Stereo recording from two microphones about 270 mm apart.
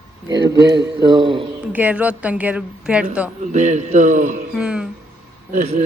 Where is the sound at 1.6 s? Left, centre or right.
Centre.